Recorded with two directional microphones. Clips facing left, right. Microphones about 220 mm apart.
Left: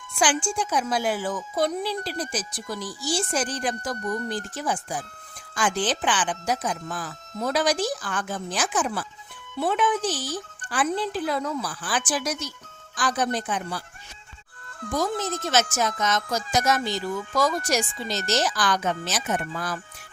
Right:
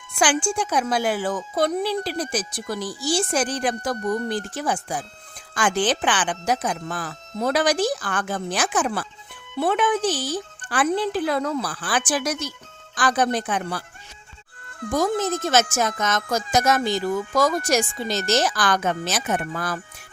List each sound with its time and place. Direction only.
0.2 s a woman's voice: 60° right (ahead or behind)
14.8 s speech: 50° right (ahead or behind)